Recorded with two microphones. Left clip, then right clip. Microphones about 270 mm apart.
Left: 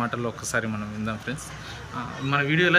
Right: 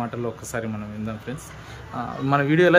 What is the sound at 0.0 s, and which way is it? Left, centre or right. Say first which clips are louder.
Speech: left 1 dB; centre.